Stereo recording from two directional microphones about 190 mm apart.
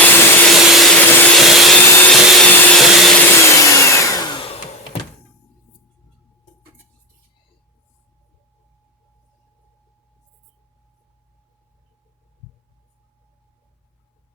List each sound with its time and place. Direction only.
0.0 s vacuum cleaner: 10° left (ahead or behind)
1.9 s vacuum cleaner: 10° left (ahead or behind)
3.4 s vacuum cleaner: 15° left (ahead or behind)